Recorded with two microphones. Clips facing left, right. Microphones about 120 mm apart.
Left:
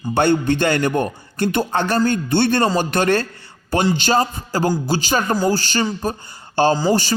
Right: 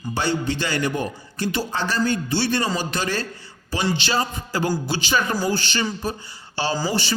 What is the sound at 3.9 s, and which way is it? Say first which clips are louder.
A man's voice: left 6 dB; 45° left (ahead or behind).